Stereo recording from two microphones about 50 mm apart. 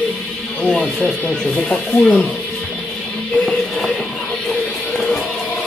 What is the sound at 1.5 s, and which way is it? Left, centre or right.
Speech, left.